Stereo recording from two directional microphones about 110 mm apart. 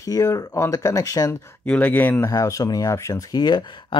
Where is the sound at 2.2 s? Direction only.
30° left (ahead or behind).